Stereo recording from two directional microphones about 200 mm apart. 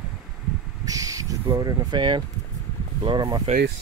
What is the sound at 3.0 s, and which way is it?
Speech, 20° right (ahead or behind).